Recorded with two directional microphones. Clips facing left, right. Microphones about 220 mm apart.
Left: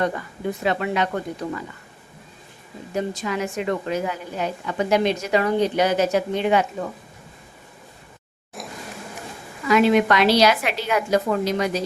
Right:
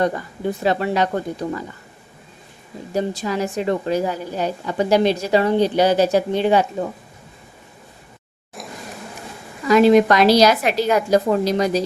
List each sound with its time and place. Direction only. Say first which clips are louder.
0.0 s a woman's voice: right 3 dB; 35° right (ahead or behind)
2.9 s a woman's voice: right 3 dB; 35° right (ahead or behind)
8.6 s vehicle: even; centre (ahead or behind)
9.6 s a woman's voice: right 4 dB; 35° right (ahead or behind)